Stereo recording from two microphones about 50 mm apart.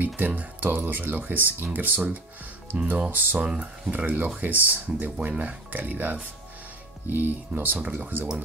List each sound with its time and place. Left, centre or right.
0.0 s speech: right
3.4 s speech: centre
3.9 s speech: right